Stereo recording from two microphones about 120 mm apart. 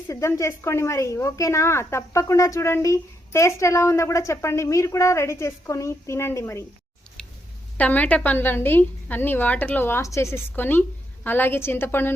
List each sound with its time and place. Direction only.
0.1 s a woman's voice: 25° left (ahead or behind)
7.2 s a sound: 5° left (ahead or behind)
7.8 s a woman's voice: 15° left (ahead or behind)